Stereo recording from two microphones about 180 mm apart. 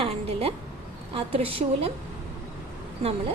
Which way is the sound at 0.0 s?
35° right (ahead or behind).